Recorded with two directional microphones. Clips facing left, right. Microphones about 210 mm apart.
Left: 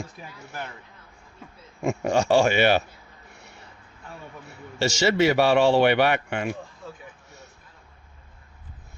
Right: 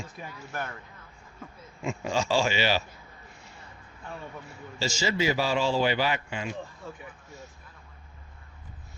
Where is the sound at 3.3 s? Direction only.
70° left (ahead or behind).